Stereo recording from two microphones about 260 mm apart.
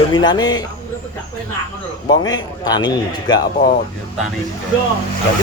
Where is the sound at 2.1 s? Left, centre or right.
Centre.